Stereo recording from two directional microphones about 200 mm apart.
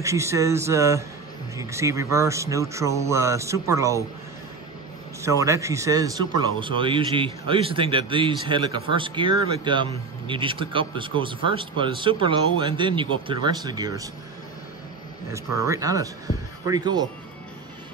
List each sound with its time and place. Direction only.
0.0 s speech: 15° right (ahead or behind)
5.2 s speech: 15° right (ahead or behind)
15.3 s speech: 15° right (ahead or behind)